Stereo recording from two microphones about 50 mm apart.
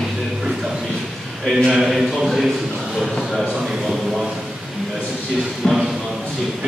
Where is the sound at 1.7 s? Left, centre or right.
Centre.